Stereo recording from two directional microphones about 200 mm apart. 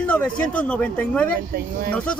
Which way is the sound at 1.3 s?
50° right (ahead or behind).